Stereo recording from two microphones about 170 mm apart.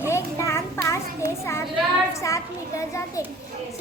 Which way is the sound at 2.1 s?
20° left (ahead or behind).